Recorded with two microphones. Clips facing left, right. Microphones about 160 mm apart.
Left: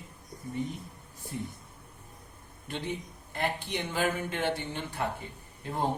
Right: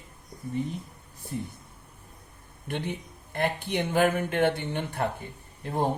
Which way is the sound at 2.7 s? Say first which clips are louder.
Right 3 dB; 55° right (ahead or behind).